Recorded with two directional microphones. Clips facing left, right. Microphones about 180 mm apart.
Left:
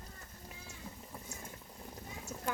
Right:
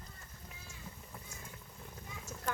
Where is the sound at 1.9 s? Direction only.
35° left (ahead or behind).